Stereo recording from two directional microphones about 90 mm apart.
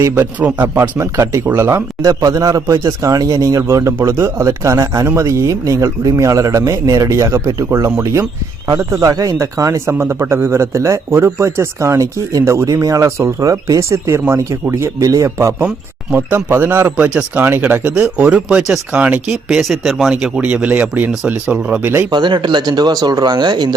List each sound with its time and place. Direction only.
0.3 s speech: 20° right (ahead or behind)
2.0 s speech: 40° right (ahead or behind)
9.0 s speech: 40° right (ahead or behind)
16.1 s speech: 25° right (ahead or behind)
22.1 s speech: 55° right (ahead or behind)